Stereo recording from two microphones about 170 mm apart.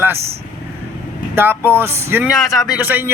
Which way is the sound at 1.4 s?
15° right (ahead or behind).